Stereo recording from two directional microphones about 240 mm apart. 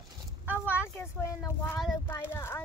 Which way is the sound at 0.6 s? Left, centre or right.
Centre.